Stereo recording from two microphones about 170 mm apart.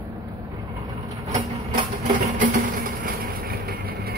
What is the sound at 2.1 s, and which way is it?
Vehicle, 50° right (ahead or behind).